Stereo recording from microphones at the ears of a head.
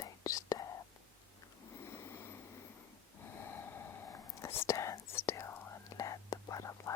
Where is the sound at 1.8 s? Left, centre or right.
Left.